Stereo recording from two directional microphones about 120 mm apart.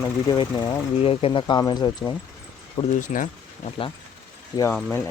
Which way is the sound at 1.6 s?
35° left (ahead or behind).